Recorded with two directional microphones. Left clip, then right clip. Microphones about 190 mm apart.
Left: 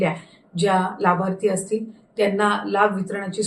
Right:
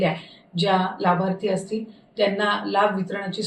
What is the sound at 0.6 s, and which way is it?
A woman's voice, 20° left (ahead or behind).